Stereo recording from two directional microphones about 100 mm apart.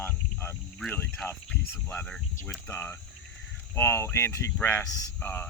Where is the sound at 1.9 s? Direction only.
20° left (ahead or behind).